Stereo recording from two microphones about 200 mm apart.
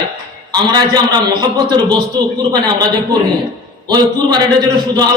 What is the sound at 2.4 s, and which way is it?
A man's voice, 20° right (ahead or behind).